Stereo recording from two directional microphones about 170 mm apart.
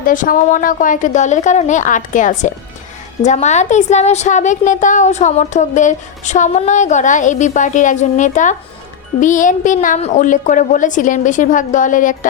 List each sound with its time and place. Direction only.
0.0 s a woman's voice: 50° left (ahead or behind)